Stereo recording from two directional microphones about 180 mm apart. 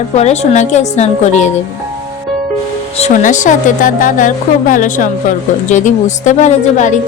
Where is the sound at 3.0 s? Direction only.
45° left (ahead or behind).